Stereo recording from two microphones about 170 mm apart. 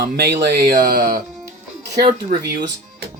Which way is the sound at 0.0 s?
65° right (ahead or behind).